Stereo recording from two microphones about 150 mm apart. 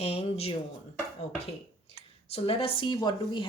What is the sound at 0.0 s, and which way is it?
Speech, 40° left (ahead or behind).